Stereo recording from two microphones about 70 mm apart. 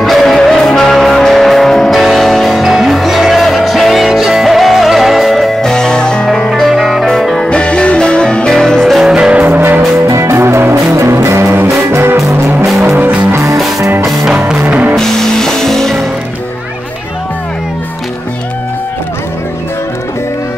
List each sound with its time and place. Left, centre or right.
0.0 s music: centre
9.1 s music: centre
9.4 s music: right
10.0 s music: right
10.4 s music: right
12.8 s music: right
14.0 s music: centre
14.7 s music: centre
15.0 s music: centre